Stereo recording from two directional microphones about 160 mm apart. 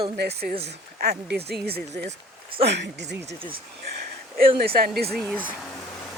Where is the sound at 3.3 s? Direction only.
35° right (ahead or behind).